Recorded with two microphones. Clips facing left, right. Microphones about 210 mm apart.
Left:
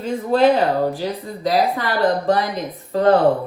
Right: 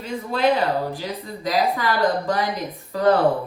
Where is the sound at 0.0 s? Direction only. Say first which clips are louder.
Left 6 dB; 45° left (ahead or behind).